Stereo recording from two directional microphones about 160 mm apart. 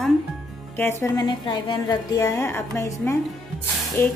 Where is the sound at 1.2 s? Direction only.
30° left (ahead or behind).